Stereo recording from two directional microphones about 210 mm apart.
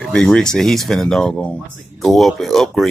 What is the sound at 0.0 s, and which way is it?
Speech, 5° left (ahead or behind).